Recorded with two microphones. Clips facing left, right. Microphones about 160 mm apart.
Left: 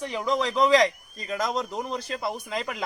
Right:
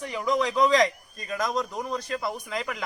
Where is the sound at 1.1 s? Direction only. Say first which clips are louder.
Right 2 dB; 25° left (ahead or behind).